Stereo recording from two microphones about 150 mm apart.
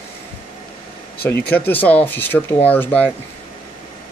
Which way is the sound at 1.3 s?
15° left (ahead or behind).